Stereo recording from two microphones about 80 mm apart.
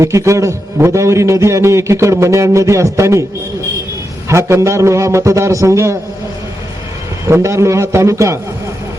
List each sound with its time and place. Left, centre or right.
0.0 s a man's voice: right
4.3 s a man's voice: right
7.3 s a man's voice: right